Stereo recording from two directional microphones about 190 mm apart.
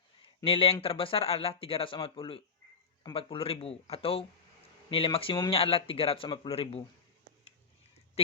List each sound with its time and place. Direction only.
0.2 s speech: 30° left (ahead or behind)